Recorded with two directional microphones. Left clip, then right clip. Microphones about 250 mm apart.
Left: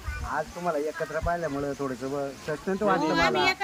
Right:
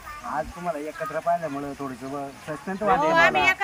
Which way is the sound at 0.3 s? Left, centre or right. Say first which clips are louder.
Right 1 dB; left.